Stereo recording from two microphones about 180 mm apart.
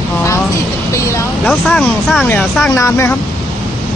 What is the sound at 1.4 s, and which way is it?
Speech, centre (ahead or behind).